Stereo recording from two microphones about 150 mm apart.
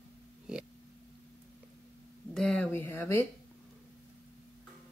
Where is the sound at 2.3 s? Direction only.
5° left (ahead or behind).